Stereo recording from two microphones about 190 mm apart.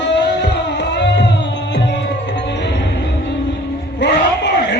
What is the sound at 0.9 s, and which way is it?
Music, 65° left (ahead or behind).